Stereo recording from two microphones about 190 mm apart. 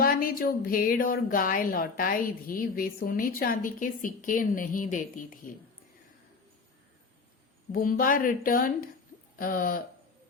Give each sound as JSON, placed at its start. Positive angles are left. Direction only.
{"t": 0.0, "sound": "speech", "side_deg": 50}
{"t": 7.7, "sound": "speech", "side_deg": 50}